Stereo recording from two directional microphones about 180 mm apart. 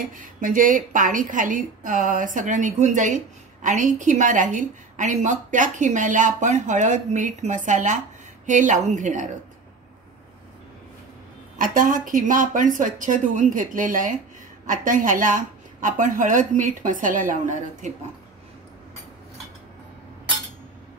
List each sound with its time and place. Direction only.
0.1 s a woman's voice: 45° right (ahead or behind)
11.5 s a woman's voice: 50° right (ahead or behind)